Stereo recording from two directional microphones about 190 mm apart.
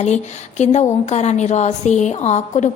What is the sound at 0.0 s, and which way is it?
A woman's voice, 35° left (ahead or behind).